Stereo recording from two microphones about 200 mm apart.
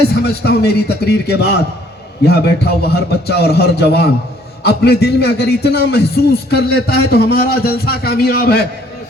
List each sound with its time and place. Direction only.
0.1 s a man's voice: 55° left (ahead or behind)